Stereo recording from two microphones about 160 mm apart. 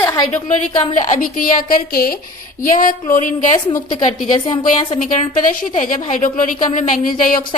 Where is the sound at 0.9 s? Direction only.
50° left (ahead or behind).